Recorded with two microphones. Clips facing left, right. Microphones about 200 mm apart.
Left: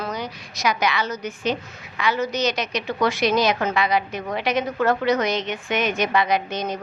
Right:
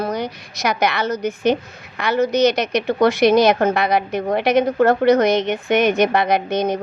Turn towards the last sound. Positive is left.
turn(degrees=-60)  # may be behind; listen again after turning